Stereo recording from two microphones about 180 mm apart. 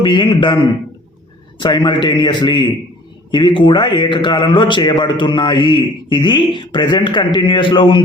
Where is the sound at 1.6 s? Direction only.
25° left (ahead or behind).